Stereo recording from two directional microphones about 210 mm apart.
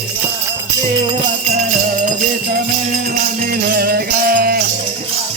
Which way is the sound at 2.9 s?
40° right (ahead or behind).